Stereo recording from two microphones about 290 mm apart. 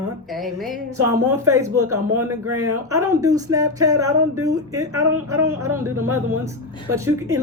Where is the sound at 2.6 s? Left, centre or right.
Centre.